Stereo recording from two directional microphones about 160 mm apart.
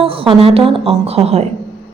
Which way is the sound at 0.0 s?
35° right (ahead or behind).